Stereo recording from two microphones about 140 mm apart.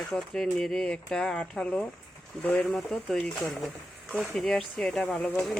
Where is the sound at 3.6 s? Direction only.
Centre (ahead or behind).